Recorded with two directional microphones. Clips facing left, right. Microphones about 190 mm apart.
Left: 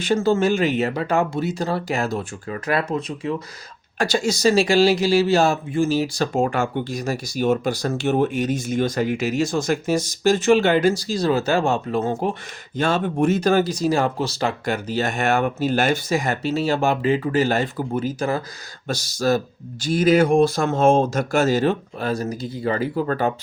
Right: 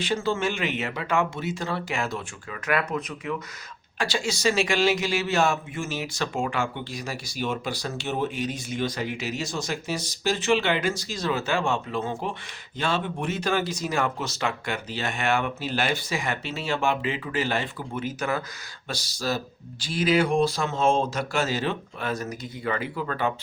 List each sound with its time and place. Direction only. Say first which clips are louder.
0.0 s speech: left 7 dB; 45° left (ahead or behind)
3.9 s speech: left 7 dB; 45° left (ahead or behind)
18.9 s speech: left 9 dB; 45° left (ahead or behind)